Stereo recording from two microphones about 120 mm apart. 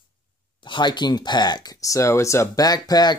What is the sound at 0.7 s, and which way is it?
Speech, 40° left (ahead or behind).